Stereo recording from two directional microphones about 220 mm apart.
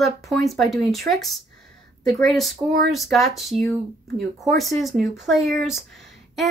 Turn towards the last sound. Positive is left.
turn(degrees=0)  # may be behind; listen again after turning